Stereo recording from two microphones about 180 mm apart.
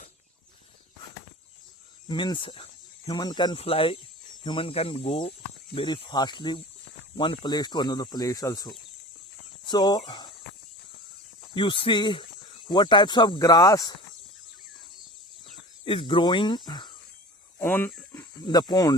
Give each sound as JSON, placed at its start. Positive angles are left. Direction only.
{"t": 2.0, "sound": "speech", "side_deg": 25}
{"t": 11.5, "sound": "speech", "side_deg": 25}
{"t": 15.8, "sound": "speech", "side_deg": 30}
{"t": 17.6, "sound": "speech", "side_deg": 10}